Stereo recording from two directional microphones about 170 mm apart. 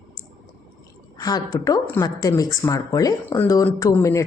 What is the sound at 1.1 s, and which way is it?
Speech, 20° left (ahead or behind).